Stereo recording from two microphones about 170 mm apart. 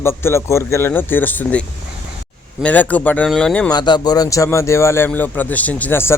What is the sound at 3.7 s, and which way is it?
A man's voice, 25° left (ahead or behind).